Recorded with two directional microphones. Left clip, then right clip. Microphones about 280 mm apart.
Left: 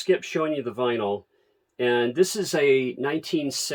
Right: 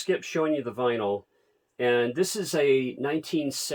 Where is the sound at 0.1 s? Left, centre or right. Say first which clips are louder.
Left 2 dB; centre.